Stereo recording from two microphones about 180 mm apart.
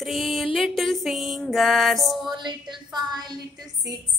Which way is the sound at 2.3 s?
25° right (ahead or behind).